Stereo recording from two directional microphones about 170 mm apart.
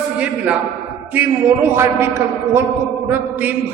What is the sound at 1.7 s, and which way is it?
Speech, 15° right (ahead or behind).